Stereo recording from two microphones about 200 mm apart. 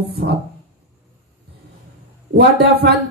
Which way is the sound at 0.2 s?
50° right (ahead or behind).